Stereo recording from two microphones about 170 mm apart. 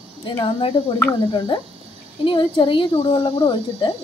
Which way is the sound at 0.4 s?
30° left (ahead or behind).